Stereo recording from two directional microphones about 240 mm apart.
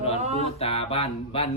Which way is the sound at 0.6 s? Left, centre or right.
Left.